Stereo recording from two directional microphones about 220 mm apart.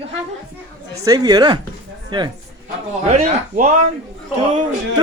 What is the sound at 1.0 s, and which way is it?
Speech, 15° right (ahead or behind).